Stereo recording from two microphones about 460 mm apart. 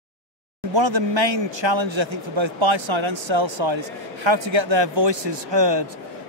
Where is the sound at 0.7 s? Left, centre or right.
Right.